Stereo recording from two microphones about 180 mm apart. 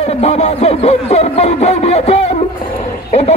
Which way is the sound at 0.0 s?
35° left (ahead or behind).